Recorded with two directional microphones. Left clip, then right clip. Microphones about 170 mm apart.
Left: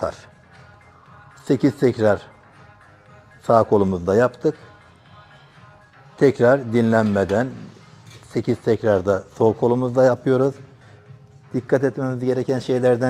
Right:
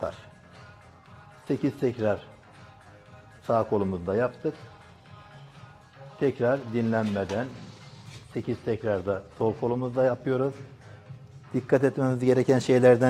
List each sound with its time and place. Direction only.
1.5 s speech: 30° left (ahead or behind)
3.4 s speech: 30° left (ahead or behind)
6.1 s speech: 35° left (ahead or behind)
11.5 s speech: centre (ahead or behind)